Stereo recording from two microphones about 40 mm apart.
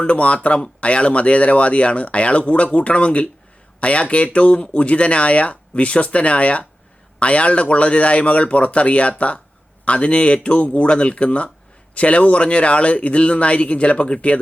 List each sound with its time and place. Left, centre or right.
0.0 s speech: left